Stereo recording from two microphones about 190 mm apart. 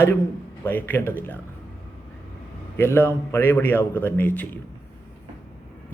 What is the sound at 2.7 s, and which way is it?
A man's voice, 10° left (ahead or behind).